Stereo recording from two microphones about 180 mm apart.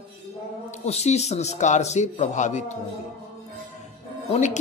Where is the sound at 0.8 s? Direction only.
35° left (ahead or behind).